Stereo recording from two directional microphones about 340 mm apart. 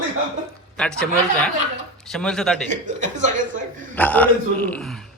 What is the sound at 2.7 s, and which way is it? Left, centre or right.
Speech, right.